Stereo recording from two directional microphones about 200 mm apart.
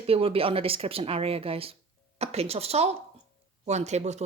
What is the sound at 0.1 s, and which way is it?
Speech, 30° right (ahead or behind).